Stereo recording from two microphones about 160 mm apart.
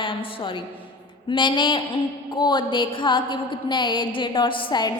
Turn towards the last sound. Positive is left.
turn(degrees=30)  # may be behind; listen again after turning